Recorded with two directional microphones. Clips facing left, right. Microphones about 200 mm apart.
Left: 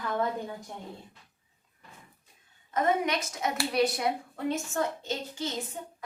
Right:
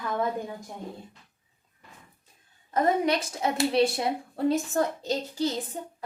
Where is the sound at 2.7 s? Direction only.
35° right (ahead or behind).